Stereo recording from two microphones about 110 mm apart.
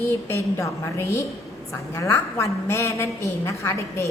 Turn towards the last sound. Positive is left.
turn(degrees=25)  # may be behind; listen again after turning